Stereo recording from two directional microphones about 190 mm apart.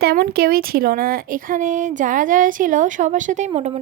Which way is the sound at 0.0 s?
55° right (ahead or behind).